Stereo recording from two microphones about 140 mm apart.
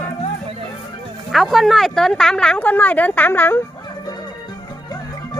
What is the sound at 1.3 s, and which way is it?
A woman's voice, centre (ahead or behind).